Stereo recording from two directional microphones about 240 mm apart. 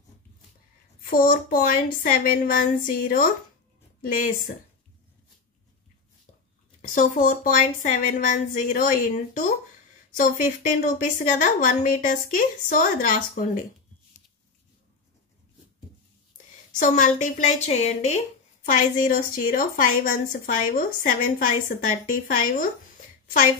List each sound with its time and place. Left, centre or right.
1.1 s a woman's voice: left
6.9 s a woman's voice: left
16.7 s a woman's voice: left